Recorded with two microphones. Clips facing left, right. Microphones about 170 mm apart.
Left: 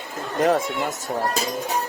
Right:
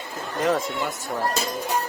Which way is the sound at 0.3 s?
55° left (ahead or behind).